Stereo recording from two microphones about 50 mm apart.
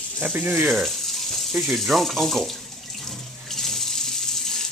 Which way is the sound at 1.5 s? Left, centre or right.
Centre.